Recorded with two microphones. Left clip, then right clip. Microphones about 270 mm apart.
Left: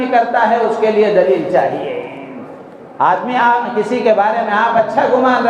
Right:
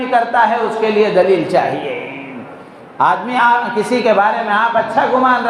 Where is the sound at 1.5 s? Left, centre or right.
Right.